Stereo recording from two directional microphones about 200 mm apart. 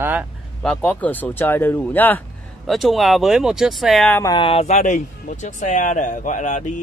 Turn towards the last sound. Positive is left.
turn(degrees=40)  # may be behind; listen again after turning